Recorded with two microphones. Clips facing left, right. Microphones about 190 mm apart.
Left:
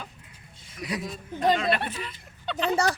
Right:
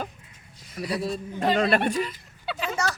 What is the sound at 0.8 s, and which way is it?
Speech, 30° right (ahead or behind).